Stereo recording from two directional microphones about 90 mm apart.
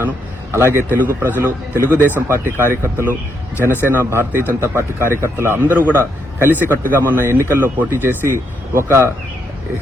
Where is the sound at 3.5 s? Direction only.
25° left (ahead or behind).